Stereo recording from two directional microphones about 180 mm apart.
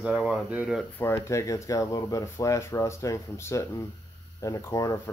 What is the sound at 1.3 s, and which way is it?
Speech, 15° left (ahead or behind).